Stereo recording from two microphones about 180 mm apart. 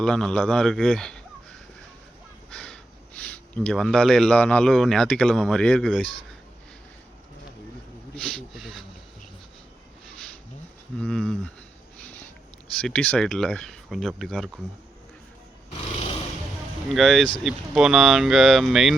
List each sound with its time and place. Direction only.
0.0 s a man's voice: 5° left (ahead or behind)
2.5 s a sound: 5° left (ahead or behind)
3.2 s a man's voice: 5° left (ahead or behind)
8.1 s speech: 5° left (ahead or behind)
10.9 s a man's voice: 5° left (ahead or behind)
12.7 s a man's voice: 5° left (ahead or behind)
15.9 s a sound: 30° left (ahead or behind)
16.9 s a man's voice: centre (ahead or behind)